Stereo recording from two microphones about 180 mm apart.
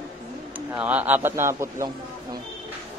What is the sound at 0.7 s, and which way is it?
Speech, 10° right (ahead or behind).